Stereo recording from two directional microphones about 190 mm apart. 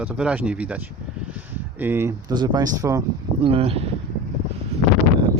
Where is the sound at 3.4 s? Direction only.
30° right (ahead or behind).